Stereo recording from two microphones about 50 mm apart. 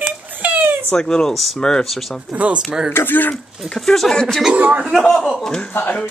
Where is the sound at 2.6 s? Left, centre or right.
Centre.